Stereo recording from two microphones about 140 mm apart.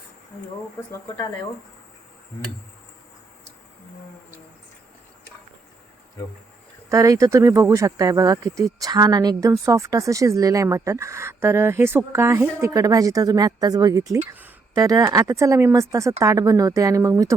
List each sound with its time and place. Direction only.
6.9 s speech: 25° right (ahead or behind)